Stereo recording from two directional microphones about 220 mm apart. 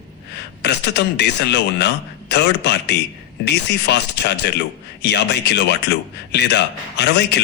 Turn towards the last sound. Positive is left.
turn(degrees=50)  # may be behind; listen again after turning